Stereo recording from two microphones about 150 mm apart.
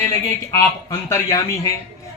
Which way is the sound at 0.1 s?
20° left (ahead or behind).